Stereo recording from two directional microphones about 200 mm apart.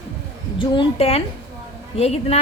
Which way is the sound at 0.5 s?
25° left (ahead or behind).